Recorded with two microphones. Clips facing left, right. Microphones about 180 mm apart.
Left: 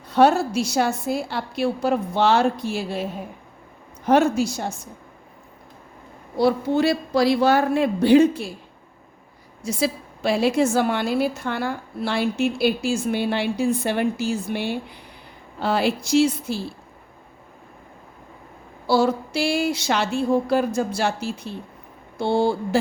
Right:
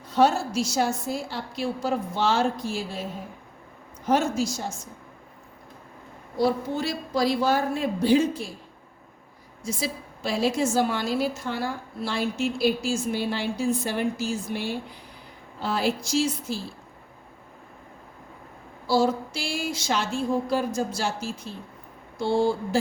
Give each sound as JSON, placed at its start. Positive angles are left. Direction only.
{"t": 0.1, "sound": "a woman's voice", "side_deg": 65}
{"t": 6.3, "sound": "speech", "side_deg": 70}
{"t": 9.6, "sound": "a woman's voice", "side_deg": 70}
{"t": 18.9, "sound": "a woman's voice", "side_deg": 65}